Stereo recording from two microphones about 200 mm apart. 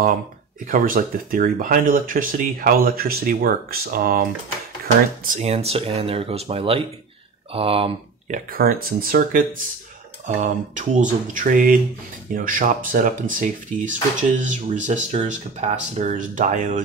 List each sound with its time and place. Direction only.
0.7 s speech: 45° right (ahead or behind); by 8.4 s 30° right (ahead or behind)
8.5 s speech: 45° right (ahead or behind)